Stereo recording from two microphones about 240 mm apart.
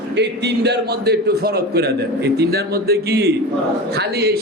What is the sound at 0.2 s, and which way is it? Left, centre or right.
A man's voice, right.